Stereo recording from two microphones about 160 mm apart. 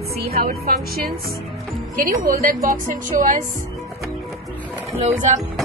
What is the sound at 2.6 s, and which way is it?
Music, 55° right (ahead or behind).